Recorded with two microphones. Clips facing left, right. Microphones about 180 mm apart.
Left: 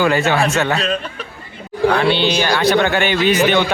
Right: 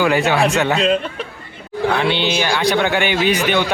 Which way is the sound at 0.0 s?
10° right (ahead or behind).